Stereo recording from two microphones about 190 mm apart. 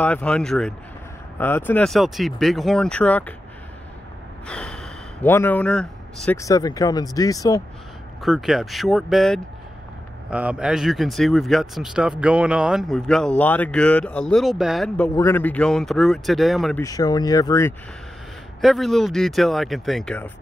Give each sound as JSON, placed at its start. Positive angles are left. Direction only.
{"t": 0.0, "sound": "speech", "side_deg": 5}
{"t": 4.5, "sound": "speech", "side_deg": 5}
{"t": 6.3, "sound": "speech", "side_deg": 15}
{"t": 8.2, "sound": "speech", "side_deg": 0}
{"t": 15.1, "sound": "speech", "side_deg": 10}
{"t": 16.8, "sound": "speech", "side_deg": 20}
{"t": 18.6, "sound": "speech", "side_deg": 0}